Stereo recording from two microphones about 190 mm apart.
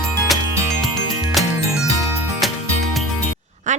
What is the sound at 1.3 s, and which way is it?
Music, centre (ahead or behind).